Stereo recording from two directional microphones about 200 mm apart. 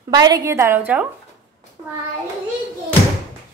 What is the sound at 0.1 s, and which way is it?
Speech, 20° right (ahead or behind).